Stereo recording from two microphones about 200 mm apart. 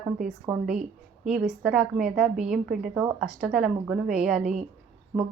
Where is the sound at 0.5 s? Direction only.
5° right (ahead or behind).